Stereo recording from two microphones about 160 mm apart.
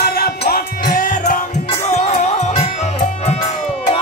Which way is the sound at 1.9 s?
45° left (ahead or behind).